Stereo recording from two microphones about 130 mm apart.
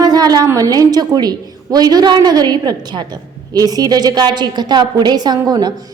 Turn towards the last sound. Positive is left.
turn(degrees=-30)  # may be behind; listen again after turning